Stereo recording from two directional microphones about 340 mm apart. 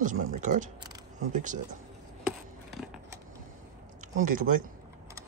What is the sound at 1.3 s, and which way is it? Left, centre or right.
Speech, right.